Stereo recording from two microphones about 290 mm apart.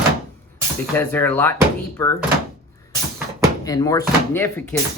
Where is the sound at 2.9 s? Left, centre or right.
Centre.